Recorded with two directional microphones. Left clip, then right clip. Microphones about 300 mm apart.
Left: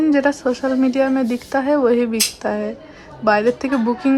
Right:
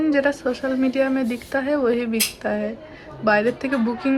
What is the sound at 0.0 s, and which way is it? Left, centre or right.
Speech, centre.